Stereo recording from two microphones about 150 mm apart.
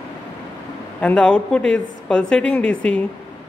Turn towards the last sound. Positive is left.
turn(degrees=10)  # may be behind; listen again after turning